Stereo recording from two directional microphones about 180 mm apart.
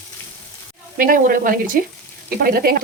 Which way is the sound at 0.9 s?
50° right (ahead or behind).